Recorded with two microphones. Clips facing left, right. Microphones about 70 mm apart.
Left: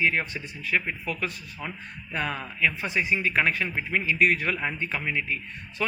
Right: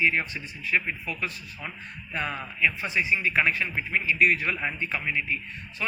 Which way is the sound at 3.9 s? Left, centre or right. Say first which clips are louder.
Even; left.